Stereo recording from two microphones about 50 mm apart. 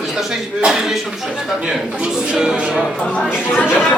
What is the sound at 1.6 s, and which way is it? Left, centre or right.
A man's voice, right.